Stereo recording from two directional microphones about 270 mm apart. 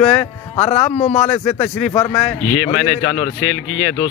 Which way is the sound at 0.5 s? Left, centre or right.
Left.